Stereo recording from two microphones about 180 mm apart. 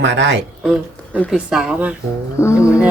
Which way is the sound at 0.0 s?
75° right (ahead or behind).